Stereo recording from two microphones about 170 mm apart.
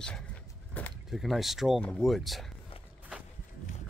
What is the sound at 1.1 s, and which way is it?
Speech, centre (ahead or behind).